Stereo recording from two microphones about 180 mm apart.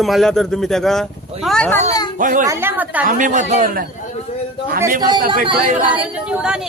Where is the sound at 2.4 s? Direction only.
15° right (ahead or behind).